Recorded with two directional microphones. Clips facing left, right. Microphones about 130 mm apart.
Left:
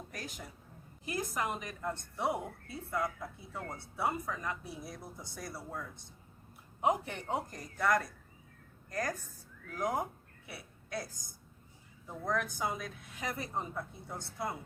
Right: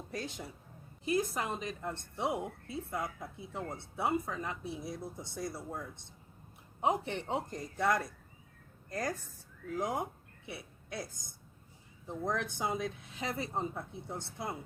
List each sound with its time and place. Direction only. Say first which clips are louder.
0.1 s a woman's voice: right 4 dB; 25° right (ahead or behind)
12.2 s a woman's voice: even; 25° right (ahead or behind)